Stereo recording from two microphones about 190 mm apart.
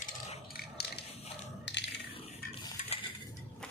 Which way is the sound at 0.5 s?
55° left (ahead or behind).